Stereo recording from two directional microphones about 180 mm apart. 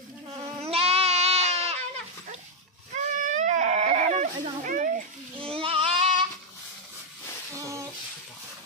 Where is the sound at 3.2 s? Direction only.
40° right (ahead or behind).